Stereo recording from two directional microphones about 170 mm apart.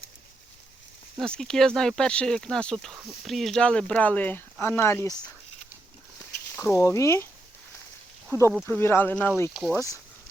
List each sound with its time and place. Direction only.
1.2 s speech: 5° left (ahead or behind)
6.6 s speech: 15° left (ahead or behind)
8.3 s speech: 15° right (ahead or behind)
8.6 s speech: 15° left (ahead or behind)